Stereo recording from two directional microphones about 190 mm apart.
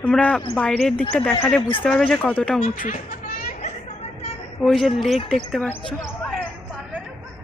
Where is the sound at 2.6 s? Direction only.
45° left (ahead or behind).